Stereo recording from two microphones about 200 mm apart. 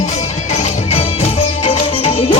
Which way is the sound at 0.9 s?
30° left (ahead or behind).